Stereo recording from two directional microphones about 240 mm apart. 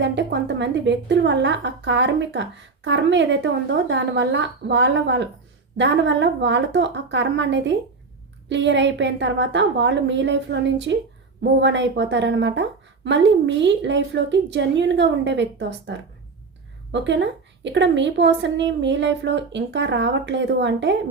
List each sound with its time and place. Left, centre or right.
0.0 s a woman's voice: right